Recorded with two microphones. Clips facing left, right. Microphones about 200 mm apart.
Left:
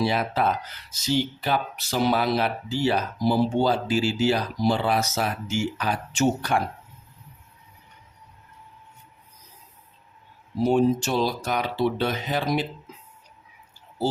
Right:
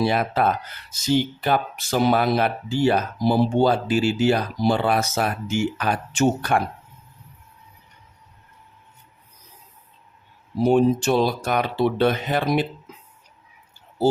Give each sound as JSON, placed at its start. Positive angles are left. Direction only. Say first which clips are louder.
{"t": 0.0, "sound": "speech", "louder": "right 3 dB", "side_deg": -55}
{"t": 10.6, "sound": "speech", "louder": "right 3 dB", "side_deg": -60}